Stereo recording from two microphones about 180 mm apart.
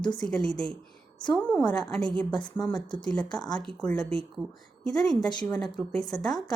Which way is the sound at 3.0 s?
5° left (ahead or behind).